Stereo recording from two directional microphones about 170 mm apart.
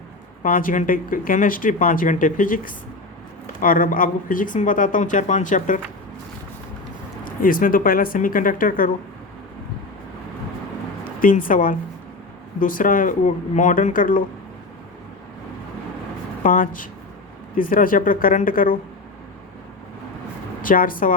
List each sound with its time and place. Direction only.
0.4 s speech: 55° left (ahead or behind)
7.3 s speech: 55° left (ahead or behind)
11.2 s speech: 55° left (ahead or behind)
16.4 s speech: 50° left (ahead or behind)
20.6 s speech: 55° left (ahead or behind)